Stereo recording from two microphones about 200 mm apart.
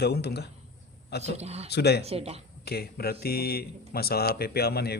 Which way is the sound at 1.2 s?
35° right (ahead or behind).